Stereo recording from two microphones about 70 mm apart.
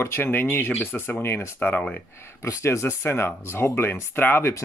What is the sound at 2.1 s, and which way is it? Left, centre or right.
Speech, left.